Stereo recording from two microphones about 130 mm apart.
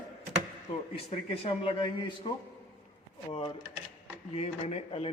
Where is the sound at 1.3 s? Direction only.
45° left (ahead or behind).